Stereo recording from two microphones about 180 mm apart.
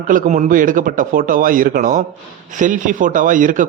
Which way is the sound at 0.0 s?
45° right (ahead or behind).